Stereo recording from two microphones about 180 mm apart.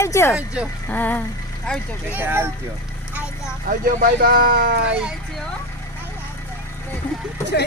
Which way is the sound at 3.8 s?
55° right (ahead or behind).